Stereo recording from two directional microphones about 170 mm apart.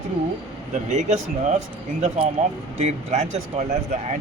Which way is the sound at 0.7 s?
45° right (ahead or behind).